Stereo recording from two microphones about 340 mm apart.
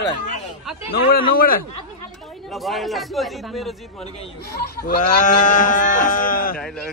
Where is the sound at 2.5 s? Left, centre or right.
Centre.